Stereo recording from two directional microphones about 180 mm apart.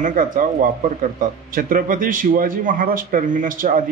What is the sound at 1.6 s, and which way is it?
Speech, 50° right (ahead or behind).